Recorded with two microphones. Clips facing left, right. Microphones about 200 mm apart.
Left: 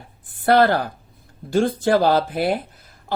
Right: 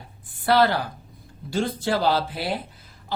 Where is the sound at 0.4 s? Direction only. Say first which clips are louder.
Left 4 dB; 50° left (ahead or behind).